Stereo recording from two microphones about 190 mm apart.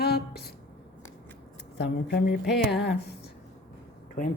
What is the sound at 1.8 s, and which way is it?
Speech, 55° left (ahead or behind).